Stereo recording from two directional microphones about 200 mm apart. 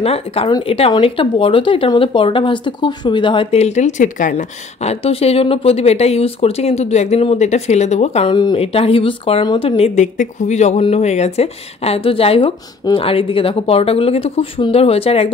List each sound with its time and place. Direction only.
0.0 s speech: 30° left (ahead or behind)